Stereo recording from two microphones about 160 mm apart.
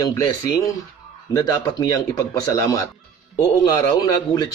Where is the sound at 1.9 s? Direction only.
20° left (ahead or behind).